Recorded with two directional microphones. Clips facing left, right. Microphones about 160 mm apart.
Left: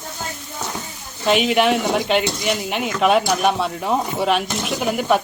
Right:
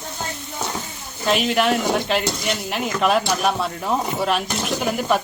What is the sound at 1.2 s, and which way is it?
Speech, centre (ahead or behind).